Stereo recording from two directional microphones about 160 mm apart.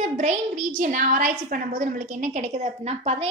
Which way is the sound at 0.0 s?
50° right (ahead or behind).